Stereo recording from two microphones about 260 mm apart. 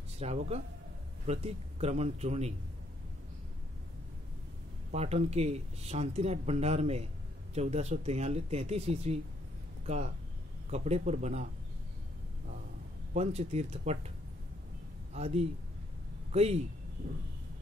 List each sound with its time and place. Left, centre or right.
0.2 s speech: right
4.9 s speech: right
13.1 s speech: right
15.1 s a man's voice: right